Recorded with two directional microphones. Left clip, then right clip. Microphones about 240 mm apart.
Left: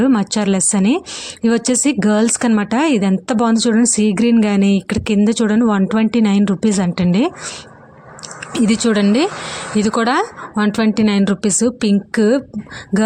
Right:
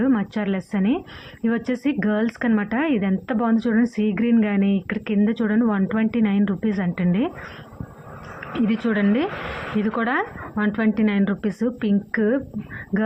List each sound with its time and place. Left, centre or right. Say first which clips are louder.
0.0 s a woman's voice: left 7 dB; left
8.5 s a woman's voice: left 7 dB; left